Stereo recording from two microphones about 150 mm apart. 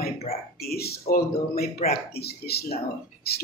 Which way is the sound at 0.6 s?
90° left.